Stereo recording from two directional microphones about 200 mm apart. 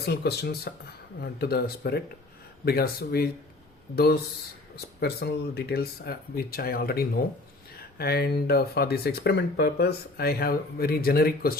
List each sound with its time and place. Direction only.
0.0 s speech: 55° left (ahead or behind)
4.9 s speech: 50° left (ahead or behind)